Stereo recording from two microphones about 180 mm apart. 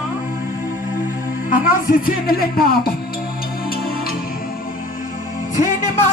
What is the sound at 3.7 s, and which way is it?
Music, 55° left (ahead or behind).